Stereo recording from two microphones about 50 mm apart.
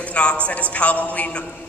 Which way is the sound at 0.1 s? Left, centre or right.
Left.